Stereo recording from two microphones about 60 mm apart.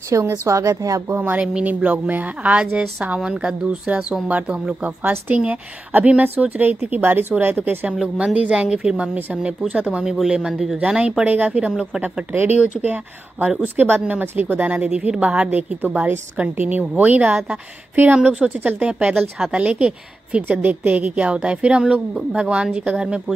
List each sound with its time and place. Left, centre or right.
0.1 s a woman's voice: right
1.3 s a woman's voice: right
3.2 s a woman's voice: centre; by 7.9 s right
7.9 s a woman's voice: centre
11.7 s speech: centre
12.3 s a woman's voice: right
18.2 s a woman's voice: centre